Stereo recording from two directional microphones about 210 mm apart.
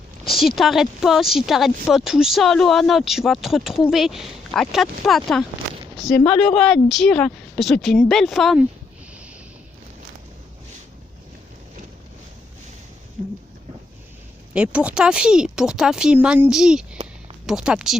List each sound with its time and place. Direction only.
0.3 s speech: centre (ahead or behind)
14.5 s speech: 5° right (ahead or behind)